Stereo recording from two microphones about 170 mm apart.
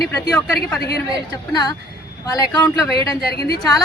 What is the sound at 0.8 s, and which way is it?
Speech, 70° left (ahead or behind).